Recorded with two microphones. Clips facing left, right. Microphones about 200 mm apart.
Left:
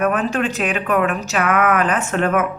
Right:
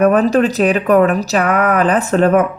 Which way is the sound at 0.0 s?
35° right (ahead or behind).